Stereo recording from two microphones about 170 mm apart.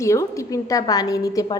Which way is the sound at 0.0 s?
15° left (ahead or behind).